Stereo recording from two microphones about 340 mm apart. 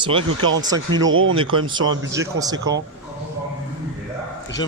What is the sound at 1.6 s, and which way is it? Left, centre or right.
Speech, centre.